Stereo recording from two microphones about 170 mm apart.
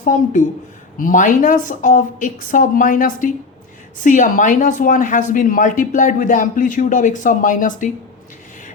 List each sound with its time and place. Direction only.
0.0 s a woman's voice: 50° left (ahead or behind)